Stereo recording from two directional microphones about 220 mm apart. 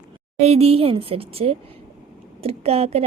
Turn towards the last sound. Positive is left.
turn(degrees=-30)  # may be behind; listen again after turning